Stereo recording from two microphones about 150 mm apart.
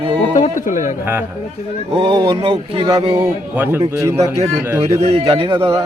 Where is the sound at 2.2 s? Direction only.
35° right (ahead or behind).